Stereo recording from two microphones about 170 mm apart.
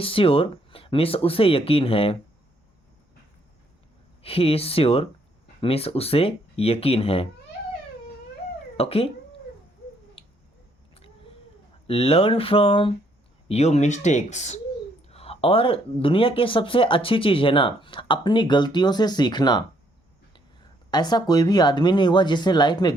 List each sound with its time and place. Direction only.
0.0 s speech: 35° left (ahead or behind)
4.2 s speech: 35° left (ahead or behind)
8.8 s speech: 35° left (ahead or behind)
11.9 s speech: 35° left (ahead or behind)
20.9 s speech: 25° left (ahead or behind)